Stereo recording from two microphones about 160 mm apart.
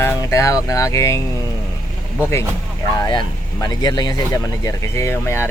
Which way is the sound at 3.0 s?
25° left (ahead or behind).